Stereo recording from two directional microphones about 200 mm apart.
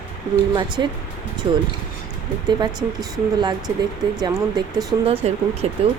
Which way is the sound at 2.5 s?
20° right (ahead or behind).